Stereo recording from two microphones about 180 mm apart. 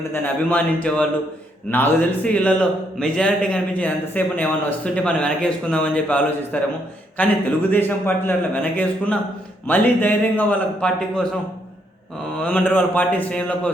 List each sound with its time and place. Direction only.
0.1 s a man's voice: 10° left (ahead or behind)
12.4 s a man's voice: 10° left (ahead or behind)